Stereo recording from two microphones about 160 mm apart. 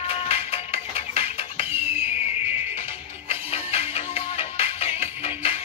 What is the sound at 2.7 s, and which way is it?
Music, 40° left (ahead or behind).